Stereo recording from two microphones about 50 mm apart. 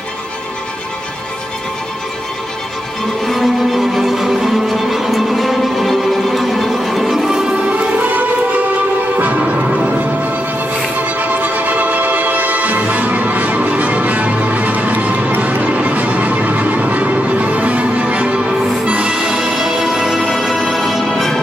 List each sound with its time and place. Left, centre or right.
3.3 s music: centre
7.7 s music: right
11.1 s music: right; by 21.4 s centre